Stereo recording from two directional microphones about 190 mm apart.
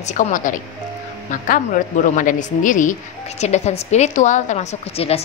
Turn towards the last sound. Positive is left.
turn(degrees=30)  # may be behind; listen again after turning